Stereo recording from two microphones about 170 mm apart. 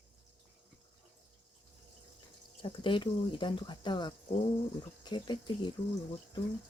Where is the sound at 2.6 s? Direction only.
30° left (ahead or behind).